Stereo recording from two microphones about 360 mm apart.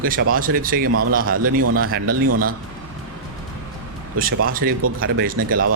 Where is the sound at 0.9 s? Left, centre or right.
Right.